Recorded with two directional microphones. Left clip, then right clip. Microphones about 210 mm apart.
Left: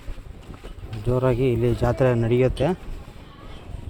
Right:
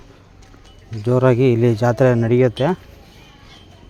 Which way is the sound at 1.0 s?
55° right (ahead or behind).